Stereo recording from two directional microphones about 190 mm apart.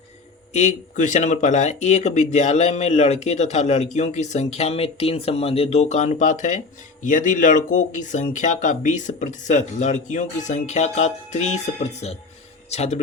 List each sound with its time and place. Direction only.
0.5 s speech: 40° left (ahead or behind)